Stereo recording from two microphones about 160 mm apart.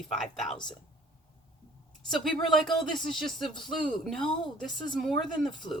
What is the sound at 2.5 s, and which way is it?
Speech, centre (ahead or behind).